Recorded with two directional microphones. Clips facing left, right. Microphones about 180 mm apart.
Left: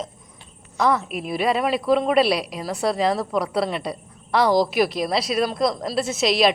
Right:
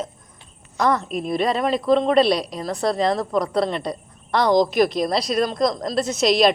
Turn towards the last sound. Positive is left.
turn(degrees=0)  # may be behind; listen again after turning